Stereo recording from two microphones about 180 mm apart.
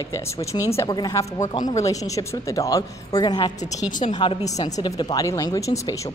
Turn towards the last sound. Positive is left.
turn(degrees=20)  # may be behind; listen again after turning